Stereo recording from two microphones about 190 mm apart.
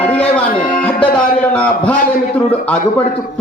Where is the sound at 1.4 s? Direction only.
5° left (ahead or behind).